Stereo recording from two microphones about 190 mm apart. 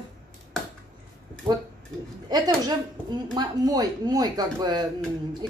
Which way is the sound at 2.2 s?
20° right (ahead or behind).